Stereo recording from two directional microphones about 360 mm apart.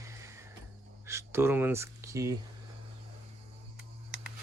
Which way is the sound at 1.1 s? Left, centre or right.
Centre.